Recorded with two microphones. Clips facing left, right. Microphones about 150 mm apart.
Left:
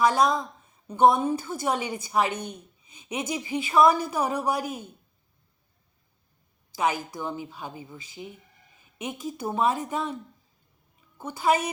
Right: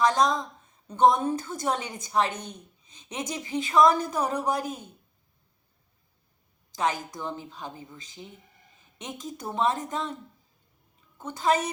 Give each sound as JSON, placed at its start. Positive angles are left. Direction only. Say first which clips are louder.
{"t": 0.0, "sound": "a woman's voice", "louder": "left 1 dB", "side_deg": 10}
{"t": 6.7, "sound": "a woman's voice", "louder": "left 2 dB", "side_deg": 10}
{"t": 11.2, "sound": "a woman's voice", "louder": "left 1 dB", "side_deg": 10}